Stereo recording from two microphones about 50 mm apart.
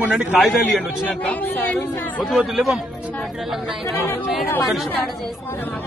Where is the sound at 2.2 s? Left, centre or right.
Centre.